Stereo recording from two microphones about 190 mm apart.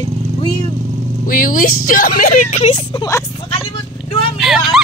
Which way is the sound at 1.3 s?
45° left (ahead or behind).